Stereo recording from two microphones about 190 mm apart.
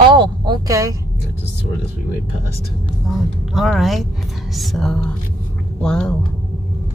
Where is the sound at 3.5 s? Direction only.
Centre (ahead or behind).